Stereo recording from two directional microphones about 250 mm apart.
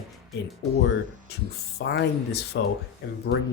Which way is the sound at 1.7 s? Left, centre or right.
Left.